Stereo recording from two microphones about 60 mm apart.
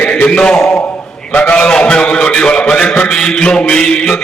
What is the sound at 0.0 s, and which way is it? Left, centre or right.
A man's voice, left.